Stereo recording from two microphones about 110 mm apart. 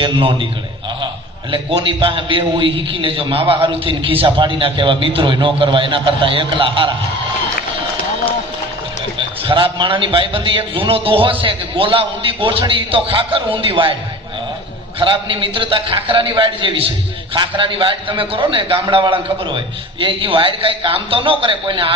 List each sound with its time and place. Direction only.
0.0 s a man's voice: 50° right (ahead or behind)
9.4 s a man's voice: 50° right (ahead or behind)
15.0 s a man's voice: 50° right (ahead or behind)